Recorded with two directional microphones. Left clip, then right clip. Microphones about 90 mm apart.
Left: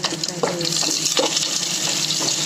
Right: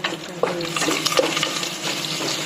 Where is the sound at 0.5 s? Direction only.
35° left (ahead or behind).